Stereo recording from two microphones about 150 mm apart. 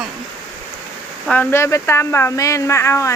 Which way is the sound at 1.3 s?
15° left (ahead or behind).